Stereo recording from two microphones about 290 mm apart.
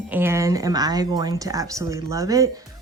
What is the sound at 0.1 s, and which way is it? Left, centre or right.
A woman's voice, centre.